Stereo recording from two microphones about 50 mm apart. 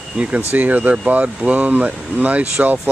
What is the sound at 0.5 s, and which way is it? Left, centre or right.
Speech, right.